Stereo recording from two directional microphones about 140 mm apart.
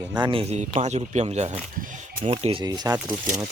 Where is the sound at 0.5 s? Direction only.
55° right (ahead or behind); by 2.9 s 30° right (ahead or behind).